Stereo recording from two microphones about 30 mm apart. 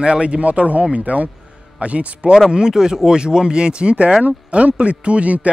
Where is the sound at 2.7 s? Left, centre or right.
Centre.